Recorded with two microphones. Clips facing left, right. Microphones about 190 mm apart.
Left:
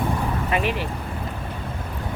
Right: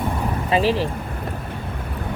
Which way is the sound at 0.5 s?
30° right (ahead or behind).